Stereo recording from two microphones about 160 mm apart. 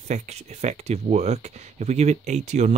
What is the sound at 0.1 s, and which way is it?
Speech, 45° right (ahead or behind).